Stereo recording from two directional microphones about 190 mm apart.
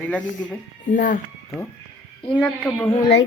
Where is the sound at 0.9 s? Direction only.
45° left (ahead or behind).